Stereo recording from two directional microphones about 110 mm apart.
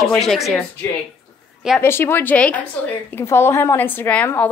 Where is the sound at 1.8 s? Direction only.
20° left (ahead or behind).